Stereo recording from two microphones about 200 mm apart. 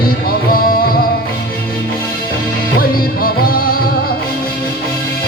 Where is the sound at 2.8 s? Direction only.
45° left (ahead or behind).